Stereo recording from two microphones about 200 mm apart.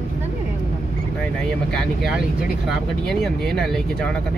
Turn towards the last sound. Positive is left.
turn(degrees=0)  # may be behind; listen again after turning